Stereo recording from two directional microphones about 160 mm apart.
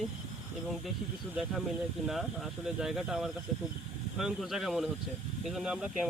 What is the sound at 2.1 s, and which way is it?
Speech, centre (ahead or behind).